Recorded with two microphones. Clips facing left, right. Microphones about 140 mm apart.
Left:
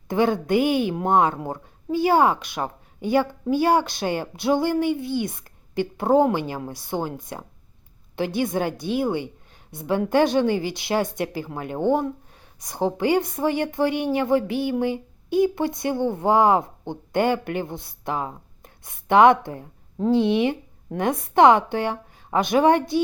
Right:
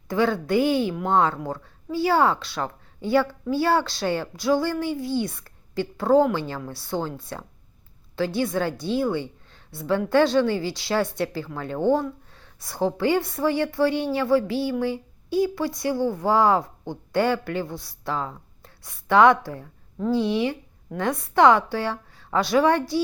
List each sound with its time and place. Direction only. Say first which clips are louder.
0.1 s a woman's voice: left 2 dB; 20° left (ahead or behind)